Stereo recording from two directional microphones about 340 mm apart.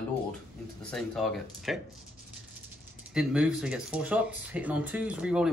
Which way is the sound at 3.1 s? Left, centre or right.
Centre.